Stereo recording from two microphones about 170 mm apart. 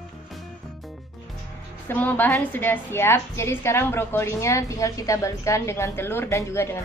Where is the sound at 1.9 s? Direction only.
10° left (ahead or behind).